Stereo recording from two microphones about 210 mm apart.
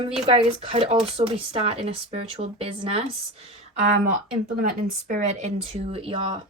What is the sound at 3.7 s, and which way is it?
Speech, 40° right (ahead or behind).